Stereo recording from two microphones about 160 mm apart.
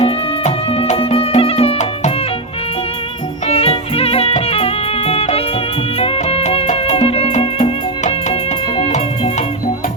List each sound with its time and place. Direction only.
0.0 s music: 40° left (ahead or behind)
3.4 s music: 40° left (ahead or behind)